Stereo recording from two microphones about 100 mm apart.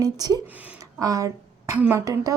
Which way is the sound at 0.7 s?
35° right (ahead or behind).